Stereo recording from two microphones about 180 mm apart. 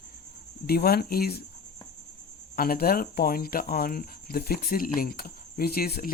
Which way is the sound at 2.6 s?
55° left (ahead or behind).